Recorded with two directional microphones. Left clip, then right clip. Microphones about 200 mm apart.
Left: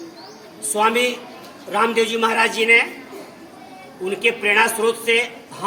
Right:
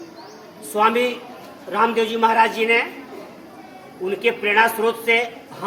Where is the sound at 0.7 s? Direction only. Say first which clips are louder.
Even; 10° left (ahead or behind).